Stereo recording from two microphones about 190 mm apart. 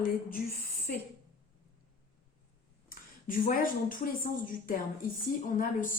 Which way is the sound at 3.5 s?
45° left (ahead or behind).